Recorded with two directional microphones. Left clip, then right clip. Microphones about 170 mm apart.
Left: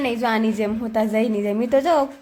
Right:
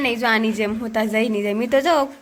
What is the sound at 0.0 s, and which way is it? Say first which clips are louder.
A woman's voice: right 2 dB; 10° left (ahead or behind).